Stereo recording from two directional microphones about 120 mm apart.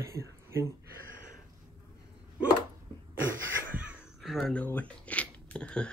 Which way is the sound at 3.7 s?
10° right (ahead or behind).